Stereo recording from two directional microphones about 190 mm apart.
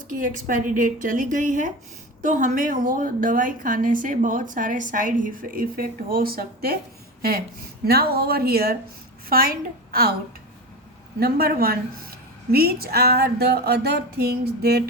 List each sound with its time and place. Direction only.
0.1 s a woman's voice: 45° right (ahead or behind)
11.2 s a woman's voice: 55° right (ahead or behind)
12.5 s a sound: 55° right (ahead or behind)